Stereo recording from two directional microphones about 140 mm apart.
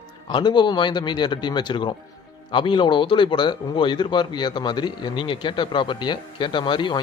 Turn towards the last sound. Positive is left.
turn(degrees=35)  # may be behind; listen again after turning